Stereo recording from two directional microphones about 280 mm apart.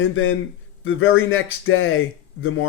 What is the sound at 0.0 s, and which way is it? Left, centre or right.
Speech, left.